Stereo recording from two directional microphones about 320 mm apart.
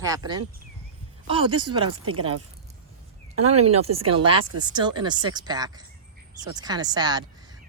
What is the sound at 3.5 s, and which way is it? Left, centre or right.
Speech, centre.